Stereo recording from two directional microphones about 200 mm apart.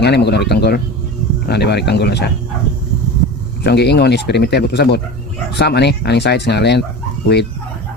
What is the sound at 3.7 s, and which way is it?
Speech, 55° left (ahead or behind).